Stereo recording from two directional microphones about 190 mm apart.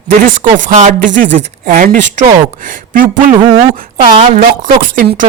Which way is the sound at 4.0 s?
30° right (ahead or behind).